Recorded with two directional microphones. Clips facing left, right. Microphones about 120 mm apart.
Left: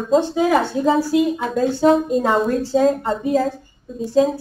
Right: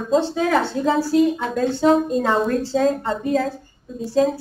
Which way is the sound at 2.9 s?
5° left (ahead or behind).